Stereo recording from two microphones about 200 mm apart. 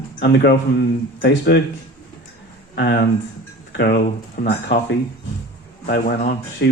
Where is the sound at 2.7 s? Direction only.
55° left (ahead or behind).